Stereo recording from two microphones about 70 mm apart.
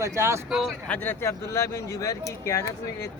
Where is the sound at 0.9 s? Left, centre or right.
Left.